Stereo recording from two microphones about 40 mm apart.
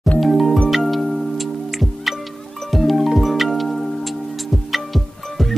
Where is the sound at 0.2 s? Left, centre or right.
Centre.